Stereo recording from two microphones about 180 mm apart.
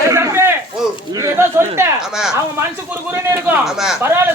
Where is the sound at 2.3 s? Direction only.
15° right (ahead or behind).